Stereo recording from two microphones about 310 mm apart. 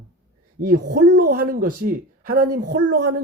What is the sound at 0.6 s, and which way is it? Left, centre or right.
Speech, right.